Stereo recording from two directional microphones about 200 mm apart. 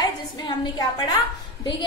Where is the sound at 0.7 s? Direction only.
20° left (ahead or behind).